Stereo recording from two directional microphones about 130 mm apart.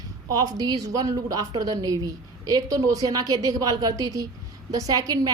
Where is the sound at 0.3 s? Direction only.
25° right (ahead or behind).